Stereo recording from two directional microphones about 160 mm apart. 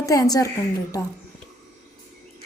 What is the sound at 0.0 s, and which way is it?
Speech, 20° left (ahead or behind).